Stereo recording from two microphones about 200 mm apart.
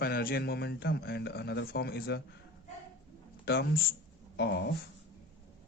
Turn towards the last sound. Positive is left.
turn(degrees=60)  # may be behind; listen again after turning